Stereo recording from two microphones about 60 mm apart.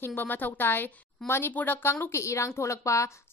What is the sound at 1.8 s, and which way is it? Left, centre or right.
Speech, left.